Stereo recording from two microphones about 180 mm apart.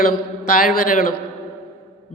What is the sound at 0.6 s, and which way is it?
Speech, 45° left (ahead or behind).